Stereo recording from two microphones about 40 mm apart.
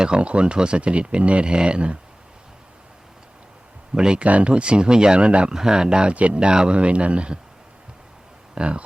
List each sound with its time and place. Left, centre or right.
0.0 s speech: right
3.9 s speech: centre
4.2 s speech: right
5.5 s speech: centre
8.5 s speech: right